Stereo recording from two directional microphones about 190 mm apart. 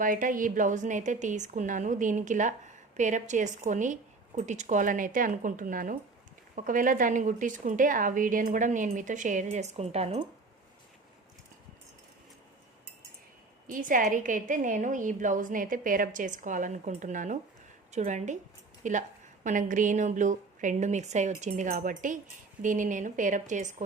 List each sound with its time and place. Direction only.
0.0 s a woman's voice: 45° right (ahead or behind)
13.7 s a woman's voice: 45° right (ahead or behind)